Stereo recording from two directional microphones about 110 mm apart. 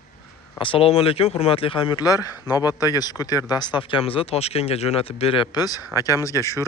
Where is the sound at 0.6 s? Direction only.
55° left (ahead or behind).